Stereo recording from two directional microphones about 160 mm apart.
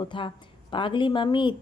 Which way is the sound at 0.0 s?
30° left (ahead or behind).